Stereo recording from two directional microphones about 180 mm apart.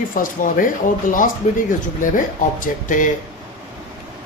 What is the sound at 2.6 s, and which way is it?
Speech, 45° left (ahead or behind).